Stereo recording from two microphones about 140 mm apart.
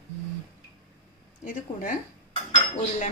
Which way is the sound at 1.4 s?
75° left (ahead or behind).